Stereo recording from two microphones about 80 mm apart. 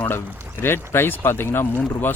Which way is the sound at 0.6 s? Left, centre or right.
Left.